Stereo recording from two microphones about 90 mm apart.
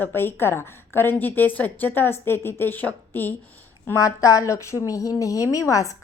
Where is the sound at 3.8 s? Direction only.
35° left (ahead or behind).